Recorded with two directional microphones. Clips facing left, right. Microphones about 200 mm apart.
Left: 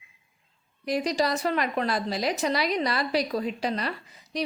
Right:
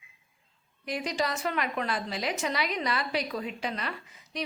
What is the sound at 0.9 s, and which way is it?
A woman's voice, 35° left (ahead or behind).